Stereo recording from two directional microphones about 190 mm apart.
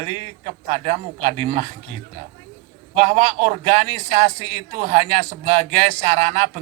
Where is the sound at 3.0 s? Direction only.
35° right (ahead or behind).